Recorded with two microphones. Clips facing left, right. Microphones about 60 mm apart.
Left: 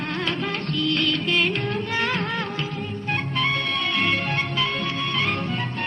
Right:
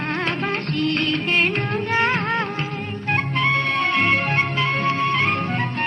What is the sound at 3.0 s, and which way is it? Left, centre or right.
Music, right.